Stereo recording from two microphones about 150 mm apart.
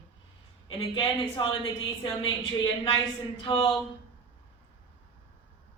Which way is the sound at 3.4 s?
35° left (ahead or behind).